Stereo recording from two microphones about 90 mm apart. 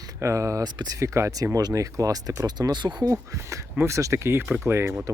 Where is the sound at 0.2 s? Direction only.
35° right (ahead or behind); by 3.2 s 55° right (ahead or behind).